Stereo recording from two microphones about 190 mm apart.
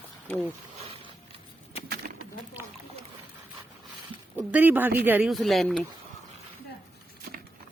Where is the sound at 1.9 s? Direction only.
45° right (ahead or behind).